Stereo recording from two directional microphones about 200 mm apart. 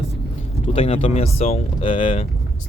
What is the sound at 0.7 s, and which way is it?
Speech, 30° left (ahead or behind).